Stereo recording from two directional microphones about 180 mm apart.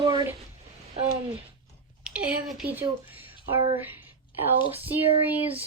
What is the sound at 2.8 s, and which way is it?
Speech, 10° right (ahead or behind).